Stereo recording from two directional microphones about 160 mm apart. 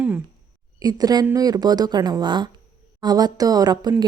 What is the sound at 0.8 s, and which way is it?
Speech, 25° right (ahead or behind).